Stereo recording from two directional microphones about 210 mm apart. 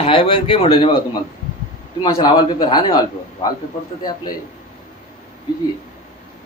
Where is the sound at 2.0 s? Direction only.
25° left (ahead or behind).